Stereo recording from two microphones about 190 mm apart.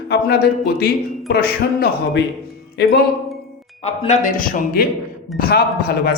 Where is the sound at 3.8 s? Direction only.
35° left (ahead or behind).